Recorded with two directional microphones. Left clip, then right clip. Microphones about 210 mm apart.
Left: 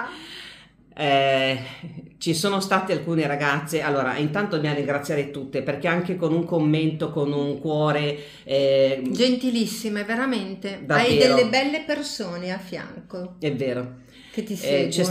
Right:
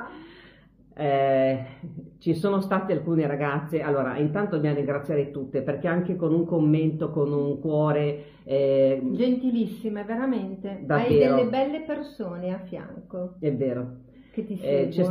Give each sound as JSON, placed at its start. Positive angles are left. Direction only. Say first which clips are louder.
{"t": 0.9, "sound": "speech", "louder": "left 2 dB", "side_deg": 5}
{"t": 9.1, "sound": "a woman's voice", "louder": "left 3 dB", "side_deg": 25}
{"t": 13.4, "sound": "speech", "louder": "left 2 dB", "side_deg": 5}